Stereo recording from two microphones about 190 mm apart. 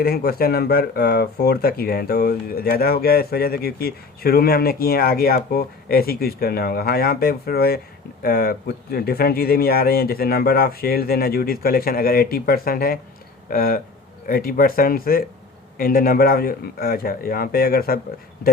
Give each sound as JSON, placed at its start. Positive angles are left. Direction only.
{"t": 0.0, "sound": "speech", "side_deg": 55}